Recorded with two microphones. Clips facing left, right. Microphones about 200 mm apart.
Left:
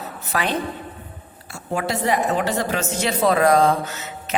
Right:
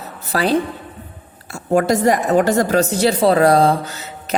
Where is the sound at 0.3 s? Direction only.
35° right (ahead or behind).